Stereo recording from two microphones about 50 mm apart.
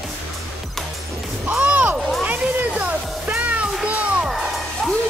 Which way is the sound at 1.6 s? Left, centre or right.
Right.